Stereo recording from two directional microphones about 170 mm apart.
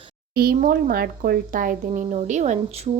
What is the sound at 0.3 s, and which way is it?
Speech, 60° right (ahead or behind).